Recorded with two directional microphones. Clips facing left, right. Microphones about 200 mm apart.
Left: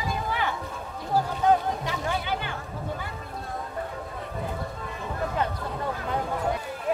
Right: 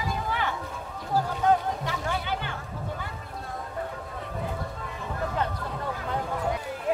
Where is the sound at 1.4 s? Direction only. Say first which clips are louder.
Left 1 dB; 15° left (ahead or behind).